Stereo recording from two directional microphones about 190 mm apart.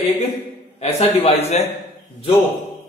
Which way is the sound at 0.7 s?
30° left (ahead or behind).